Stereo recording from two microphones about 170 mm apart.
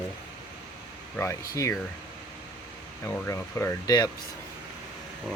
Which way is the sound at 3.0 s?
15° left (ahead or behind).